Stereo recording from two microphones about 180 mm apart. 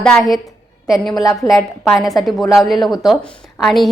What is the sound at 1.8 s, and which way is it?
A woman's voice, centre (ahead or behind).